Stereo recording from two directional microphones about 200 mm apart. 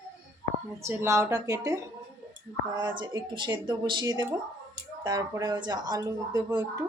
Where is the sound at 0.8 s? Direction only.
15° right (ahead or behind).